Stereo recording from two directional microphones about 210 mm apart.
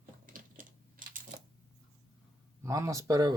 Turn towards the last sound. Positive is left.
turn(degrees=-15)  # may be behind; listen again after turning